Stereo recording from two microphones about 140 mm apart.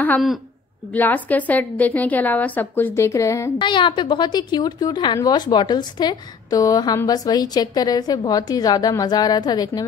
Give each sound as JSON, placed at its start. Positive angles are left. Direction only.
{"t": 0.9, "sound": "a woman's voice", "side_deg": 10}
{"t": 3.5, "sound": "a woman's voice", "side_deg": 35}